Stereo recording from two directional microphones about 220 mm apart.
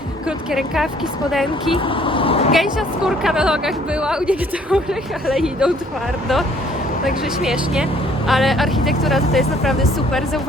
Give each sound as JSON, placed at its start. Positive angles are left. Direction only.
{"t": 0.3, "sound": "speech", "side_deg": 0}
{"t": 1.7, "sound": "speech", "side_deg": 25}
{"t": 2.5, "sound": "speech", "side_deg": 0}
{"t": 7.0, "sound": "speech", "side_deg": 0}